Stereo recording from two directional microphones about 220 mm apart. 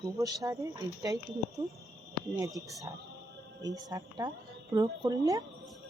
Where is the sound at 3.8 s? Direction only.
20° right (ahead or behind).